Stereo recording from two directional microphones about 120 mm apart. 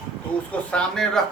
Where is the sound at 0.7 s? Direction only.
5° left (ahead or behind).